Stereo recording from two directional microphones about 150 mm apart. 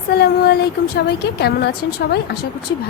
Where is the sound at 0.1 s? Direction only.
90° left.